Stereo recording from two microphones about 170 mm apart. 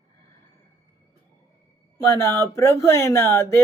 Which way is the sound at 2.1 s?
15° left (ahead or behind).